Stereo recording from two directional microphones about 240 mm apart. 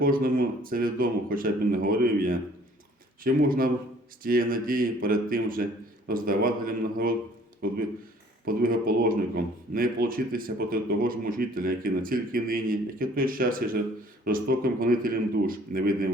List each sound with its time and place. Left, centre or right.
0.0 s speech: right
8.4 s speech: right